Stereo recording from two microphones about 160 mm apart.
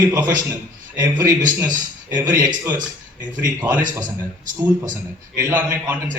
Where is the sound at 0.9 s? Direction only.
10° right (ahead or behind).